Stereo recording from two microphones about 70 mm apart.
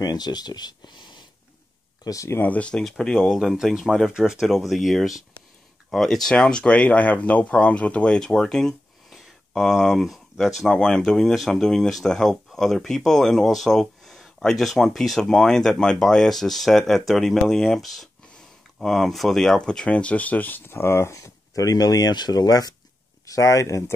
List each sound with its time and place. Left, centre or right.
0.0 s speech: left
2.0 s speech: left
2.3 s speech: left
2.7 s speech: centre
3.2 s speech: centre
10.7 s speech: centre; by 22.8 s left
23.2 s speech: left